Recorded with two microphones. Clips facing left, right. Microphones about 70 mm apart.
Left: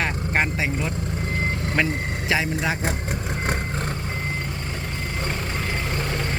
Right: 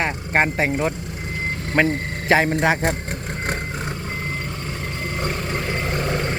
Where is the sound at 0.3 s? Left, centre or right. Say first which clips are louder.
Right 5 dB; right.